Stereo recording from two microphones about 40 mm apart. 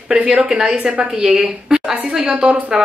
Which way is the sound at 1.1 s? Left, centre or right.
Centre.